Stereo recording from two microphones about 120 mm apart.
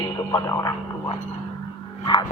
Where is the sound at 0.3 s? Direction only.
25° left (ahead or behind).